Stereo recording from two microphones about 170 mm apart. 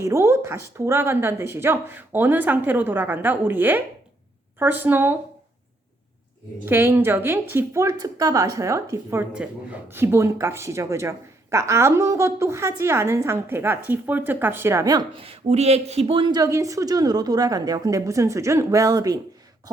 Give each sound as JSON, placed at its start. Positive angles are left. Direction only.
{"t": 0.0, "sound": "speech", "side_deg": -15}
{"t": 6.7, "sound": "speech", "side_deg": -10}
{"t": 15.2, "sound": "a woman's voice", "side_deg": -35}